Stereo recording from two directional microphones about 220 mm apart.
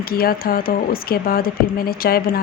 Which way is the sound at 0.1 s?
45° left (ahead or behind).